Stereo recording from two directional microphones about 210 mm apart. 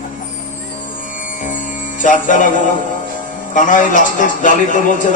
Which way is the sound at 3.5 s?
40° left (ahead or behind).